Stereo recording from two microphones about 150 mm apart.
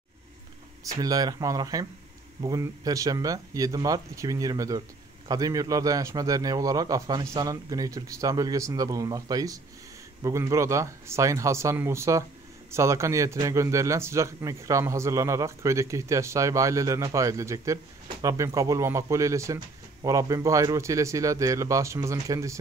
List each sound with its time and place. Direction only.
0.8 s a man's voice: 25° right (ahead or behind)